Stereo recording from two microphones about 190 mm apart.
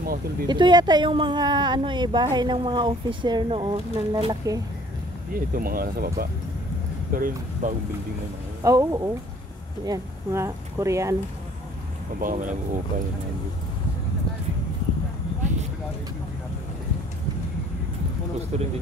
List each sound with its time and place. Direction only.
0.0 s speech: 50° right (ahead or behind)
0.5 s speech: 25° right (ahead or behind)
5.3 s speech: 50° right (ahead or behind)
8.6 s speech: 20° right (ahead or behind)
12.2 s speech: 45° right (ahead or behind)